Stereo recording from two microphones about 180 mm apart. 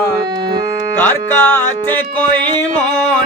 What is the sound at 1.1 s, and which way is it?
Music, 10° left (ahead or behind).